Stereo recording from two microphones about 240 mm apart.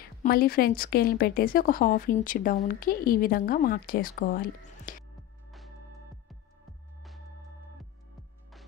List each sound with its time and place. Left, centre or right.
0.0 s speech: left